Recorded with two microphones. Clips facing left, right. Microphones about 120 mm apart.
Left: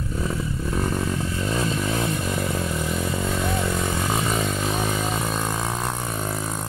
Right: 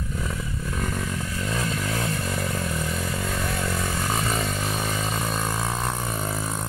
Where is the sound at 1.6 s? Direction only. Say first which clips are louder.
Left 4 dB; 20° left (ahead or behind); by 5.6 s centre (ahead or behind).